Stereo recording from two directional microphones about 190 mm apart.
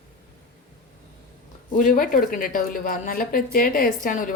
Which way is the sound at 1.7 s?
45° left (ahead or behind).